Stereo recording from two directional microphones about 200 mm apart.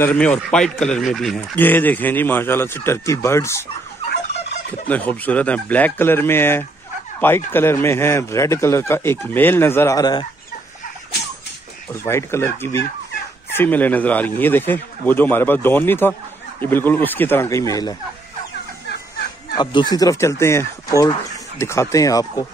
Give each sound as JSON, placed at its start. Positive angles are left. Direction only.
{"t": 0.0, "sound": "speech", "side_deg": 5}
{"t": 4.8, "sound": "speech", "side_deg": 10}
{"t": 11.9, "sound": "speech", "side_deg": 15}
{"t": 19.5, "sound": "speech", "side_deg": 20}